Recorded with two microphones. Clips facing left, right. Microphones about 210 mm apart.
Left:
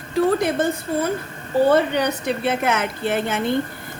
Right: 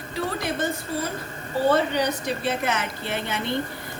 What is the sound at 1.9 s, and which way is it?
Speech, 60° left (ahead or behind).